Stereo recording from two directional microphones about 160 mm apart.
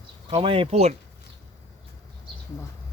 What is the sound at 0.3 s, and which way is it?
Speech, 35° right (ahead or behind).